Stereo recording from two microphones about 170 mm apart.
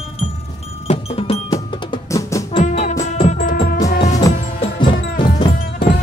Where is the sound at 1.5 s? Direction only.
20° left (ahead or behind).